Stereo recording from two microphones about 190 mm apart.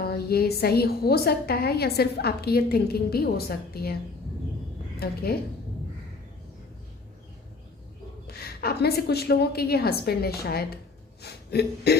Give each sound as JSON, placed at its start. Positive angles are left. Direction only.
{"t": 0.0, "sound": "a woman's voice", "side_deg": 55}
{"t": 4.9, "sound": "a woman's voice", "side_deg": 55}
{"t": 8.3, "sound": "a woman's voice", "side_deg": 55}
{"t": 11.2, "sound": "a sound", "side_deg": 60}